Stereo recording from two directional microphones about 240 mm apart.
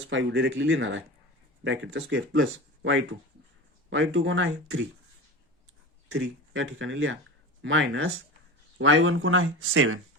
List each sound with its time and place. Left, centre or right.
0.0 s speech: right
6.1 s speech: right